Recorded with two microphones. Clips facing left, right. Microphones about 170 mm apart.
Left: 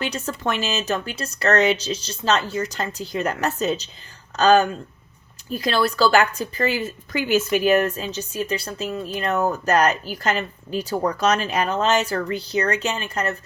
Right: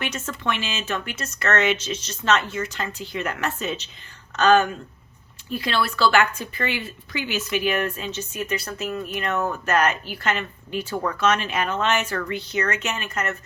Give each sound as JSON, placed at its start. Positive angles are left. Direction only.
{"t": 0.0, "sound": "a woman's voice", "side_deg": 35}